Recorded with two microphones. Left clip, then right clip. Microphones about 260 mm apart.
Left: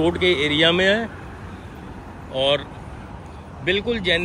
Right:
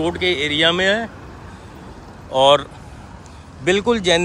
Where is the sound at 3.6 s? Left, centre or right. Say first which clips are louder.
Right 5 dB; right.